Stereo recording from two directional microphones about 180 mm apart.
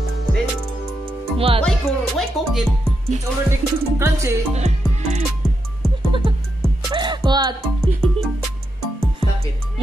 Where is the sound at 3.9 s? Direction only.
15° right (ahead or behind).